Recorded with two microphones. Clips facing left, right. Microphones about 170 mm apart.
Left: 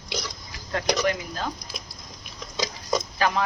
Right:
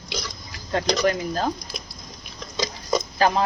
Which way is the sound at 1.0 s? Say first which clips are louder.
Right 4 dB; 40° right (ahead or behind).